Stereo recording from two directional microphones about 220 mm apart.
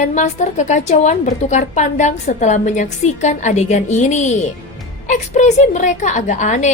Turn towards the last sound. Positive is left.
turn(degrees=35)  # may be behind; listen again after turning